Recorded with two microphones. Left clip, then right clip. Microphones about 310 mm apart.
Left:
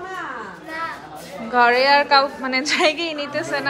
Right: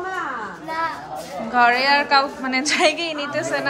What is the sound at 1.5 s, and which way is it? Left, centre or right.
A woman's voice, centre.